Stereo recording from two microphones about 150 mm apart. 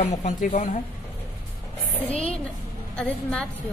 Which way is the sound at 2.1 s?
40° left (ahead or behind).